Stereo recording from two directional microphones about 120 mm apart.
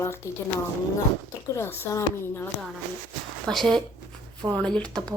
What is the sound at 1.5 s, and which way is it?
Speech, 20° left (ahead or behind).